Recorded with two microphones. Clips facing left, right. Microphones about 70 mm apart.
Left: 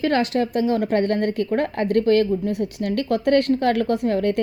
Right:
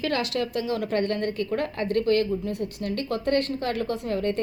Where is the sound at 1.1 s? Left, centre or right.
Left.